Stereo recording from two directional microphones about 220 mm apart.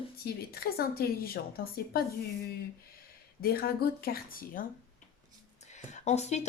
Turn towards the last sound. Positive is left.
turn(degrees=30)  # may be behind; listen again after turning